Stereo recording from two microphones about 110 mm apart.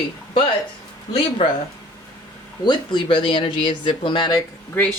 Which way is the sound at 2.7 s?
45° left (ahead or behind).